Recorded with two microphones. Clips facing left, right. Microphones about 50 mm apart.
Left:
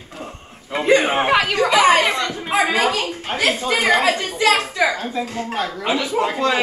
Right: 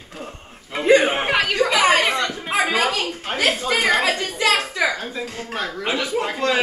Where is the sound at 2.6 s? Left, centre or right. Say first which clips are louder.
Left 2 dB; centre.